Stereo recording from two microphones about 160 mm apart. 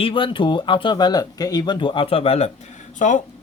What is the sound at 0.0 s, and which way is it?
Speech, 30° left (ahead or behind).